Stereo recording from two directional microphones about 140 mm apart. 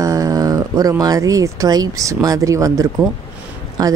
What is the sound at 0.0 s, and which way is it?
Speech, 25° right (ahead or behind).